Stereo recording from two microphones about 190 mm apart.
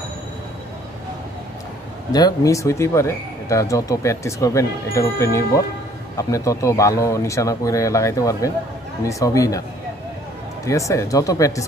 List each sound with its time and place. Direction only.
2.1 s speech: 20° left (ahead or behind)
10.6 s speech: 15° left (ahead or behind)